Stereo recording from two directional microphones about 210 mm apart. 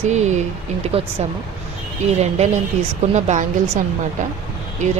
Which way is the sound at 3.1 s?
35° right (ahead or behind).